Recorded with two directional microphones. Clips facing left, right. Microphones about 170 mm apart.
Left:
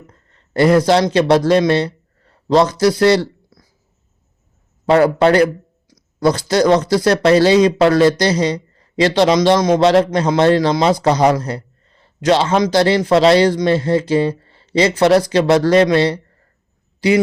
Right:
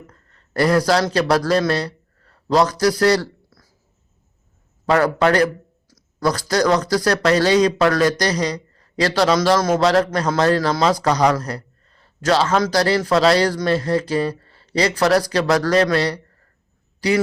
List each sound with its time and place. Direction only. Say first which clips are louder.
0.1 s speech: left 4 dB; 25° left (ahead or behind)
4.9 s a man's voice: left 5 dB; 25° left (ahead or behind)